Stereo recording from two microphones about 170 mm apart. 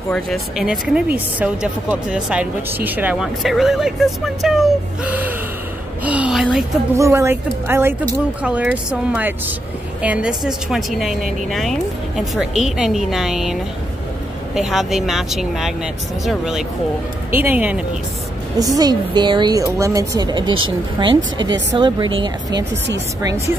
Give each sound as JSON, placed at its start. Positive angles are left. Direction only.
{"t": 0.1, "sound": "speech", "side_deg": 0}
{"t": 7.0, "sound": "a woman's voice", "side_deg": -15}
{"t": 18.6, "sound": "speech", "side_deg": -20}